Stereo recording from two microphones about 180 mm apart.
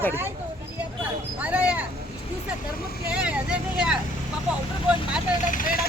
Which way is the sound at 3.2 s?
5° right (ahead or behind).